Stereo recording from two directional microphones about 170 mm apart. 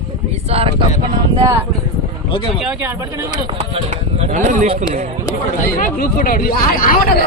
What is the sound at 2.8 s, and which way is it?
Speech, 15° right (ahead or behind).